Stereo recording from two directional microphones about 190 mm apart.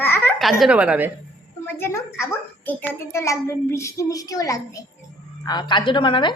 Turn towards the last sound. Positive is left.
turn(degrees=25)  # may be behind; listen again after turning